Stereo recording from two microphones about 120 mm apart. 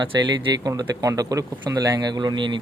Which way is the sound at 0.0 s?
35° right (ahead or behind).